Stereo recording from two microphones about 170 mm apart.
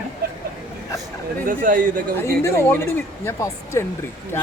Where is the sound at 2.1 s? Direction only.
15° left (ahead or behind).